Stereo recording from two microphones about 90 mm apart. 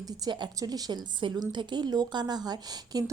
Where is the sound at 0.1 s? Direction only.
55° right (ahead or behind).